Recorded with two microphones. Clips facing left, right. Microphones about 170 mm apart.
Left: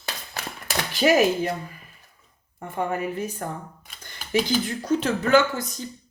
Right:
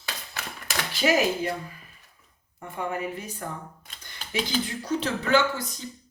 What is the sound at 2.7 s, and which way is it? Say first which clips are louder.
Speech: left 4 dB; 45° left (ahead or behind).